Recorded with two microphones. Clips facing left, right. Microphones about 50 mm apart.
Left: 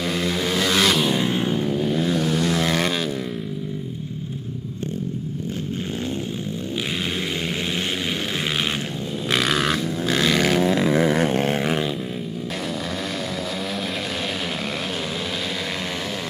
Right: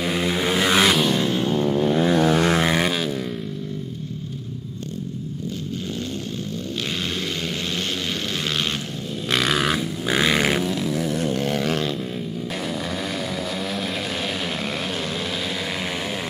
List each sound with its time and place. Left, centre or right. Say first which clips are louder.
0.0 s vehicle: right 1 dB; centre
0.9 s vehicle: right 1 dB; centre
1.2 s vehicle: right 1 dB; centre
1.9 s vehicle: right 6 dB; right
2.7 s vehicle: right 1 dB; centre
9.3 s vehicle: even; centre
10.0 s a sound: even; centre
10.6 s a sound: left 5 dB; left